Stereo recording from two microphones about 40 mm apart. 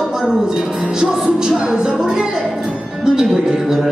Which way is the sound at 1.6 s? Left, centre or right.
Right.